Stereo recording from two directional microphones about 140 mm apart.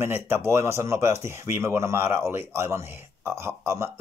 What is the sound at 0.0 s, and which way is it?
Speech, 15° right (ahead or behind).